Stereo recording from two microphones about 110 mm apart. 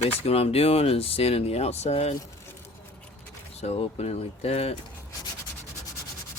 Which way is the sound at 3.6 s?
75° left (ahead or behind).